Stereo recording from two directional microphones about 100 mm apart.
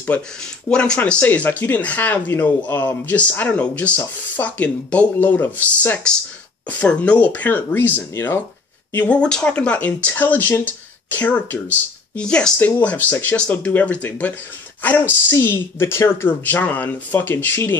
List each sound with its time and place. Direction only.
0.7 s speech: 10° left (ahead or behind)